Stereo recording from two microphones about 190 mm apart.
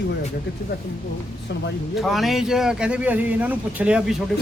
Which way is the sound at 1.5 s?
65° left (ahead or behind).